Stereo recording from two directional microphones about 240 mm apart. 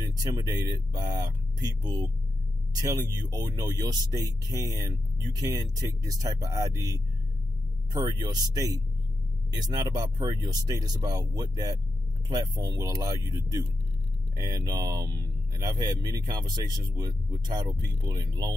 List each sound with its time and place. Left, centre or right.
0.0 s speech: centre